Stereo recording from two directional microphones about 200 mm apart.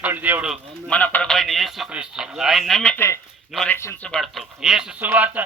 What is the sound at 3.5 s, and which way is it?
Speech, centre (ahead or behind).